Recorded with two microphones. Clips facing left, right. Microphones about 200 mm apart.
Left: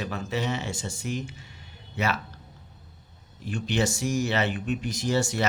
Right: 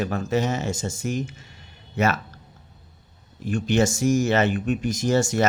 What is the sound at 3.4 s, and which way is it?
Speech, 45° right (ahead or behind).